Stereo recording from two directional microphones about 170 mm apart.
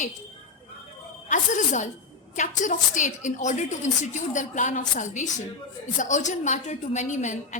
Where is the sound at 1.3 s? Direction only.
50° left (ahead or behind).